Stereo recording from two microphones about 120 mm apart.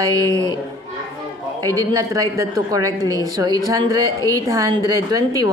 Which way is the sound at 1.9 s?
30° right (ahead or behind).